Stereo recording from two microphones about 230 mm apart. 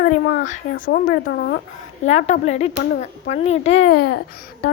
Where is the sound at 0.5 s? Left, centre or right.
Left.